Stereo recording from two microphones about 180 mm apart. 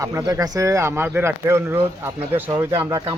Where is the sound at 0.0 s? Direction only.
15° right (ahead or behind).